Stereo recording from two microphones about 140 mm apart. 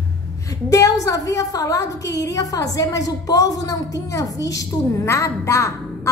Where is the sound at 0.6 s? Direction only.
25° left (ahead or behind).